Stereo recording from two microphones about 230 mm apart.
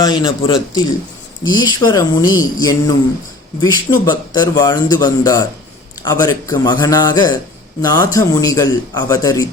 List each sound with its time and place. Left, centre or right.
0.0 s a man's voice: centre